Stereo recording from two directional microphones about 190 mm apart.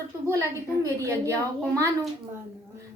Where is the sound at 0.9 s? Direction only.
15° right (ahead or behind).